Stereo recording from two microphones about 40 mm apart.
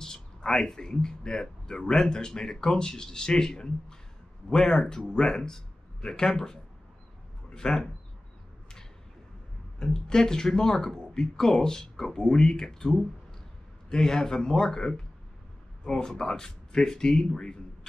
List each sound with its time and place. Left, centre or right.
0.0 s speech: centre
9.8 s speech: centre